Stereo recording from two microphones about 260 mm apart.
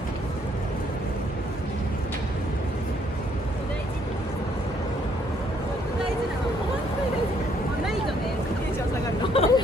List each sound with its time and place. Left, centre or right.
9.3 s hubbub: left